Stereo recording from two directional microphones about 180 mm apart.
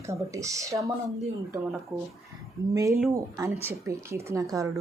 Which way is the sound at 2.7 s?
15° right (ahead or behind).